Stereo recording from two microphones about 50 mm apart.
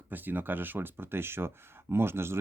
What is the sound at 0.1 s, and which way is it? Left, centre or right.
Speech, right.